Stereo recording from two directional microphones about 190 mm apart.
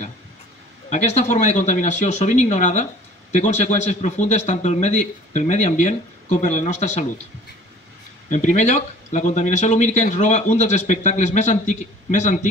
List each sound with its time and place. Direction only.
0.8 s speech: 40° left (ahead or behind)
8.3 s speech: 40° left (ahead or behind)